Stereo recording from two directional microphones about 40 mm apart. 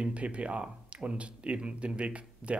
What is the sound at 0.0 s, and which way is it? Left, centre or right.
Speech, right.